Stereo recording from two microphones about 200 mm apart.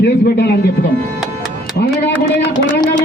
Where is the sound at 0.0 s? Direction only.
55° left (ahead or behind).